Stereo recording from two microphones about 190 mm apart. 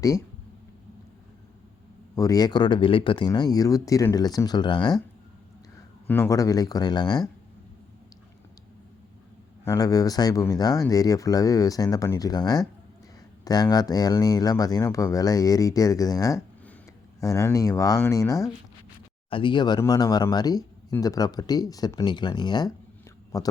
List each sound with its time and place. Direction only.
2.1 s speech: 20° left (ahead or behind)
6.1 s speech: 15° left (ahead or behind)
9.6 s speech: 20° left (ahead or behind)